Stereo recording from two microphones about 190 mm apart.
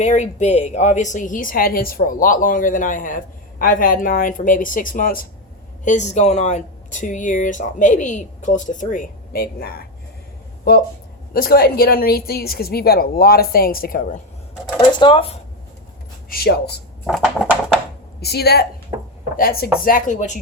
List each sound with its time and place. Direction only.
0.0 s a woman's voice: 40° left (ahead or behind); by 9.8 s 55° left (ahead or behind)
11.3 s a woman's voice: 50° left (ahead or behind)
14.8 s speech: 25° left (ahead or behind)
16.3 s speech: 55° left (ahead or behind)
17.1 s a sound: centre (ahead or behind)
18.2 s a woman's voice: 55° left (ahead or behind); by 20.4 s 40° left (ahead or behind)